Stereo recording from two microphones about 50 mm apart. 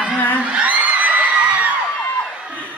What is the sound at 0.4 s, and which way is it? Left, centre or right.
Whoop, right.